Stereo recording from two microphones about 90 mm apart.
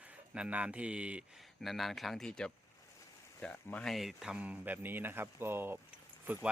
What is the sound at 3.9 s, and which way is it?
Speech, centre (ahead or behind).